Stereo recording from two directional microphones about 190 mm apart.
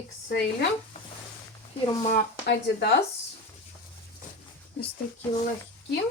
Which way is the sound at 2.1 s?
60° left (ahead or behind).